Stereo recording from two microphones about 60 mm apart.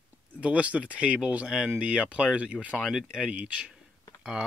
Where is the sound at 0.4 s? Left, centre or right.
Right.